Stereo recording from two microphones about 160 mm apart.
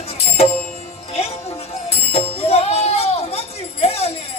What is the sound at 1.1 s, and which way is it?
Music, 40° left (ahead or behind).